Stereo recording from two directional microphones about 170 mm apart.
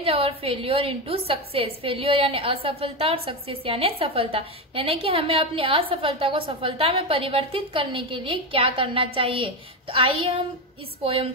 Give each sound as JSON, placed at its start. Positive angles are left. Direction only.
{"t": 0.0, "sound": "a woman's voice", "side_deg": -35}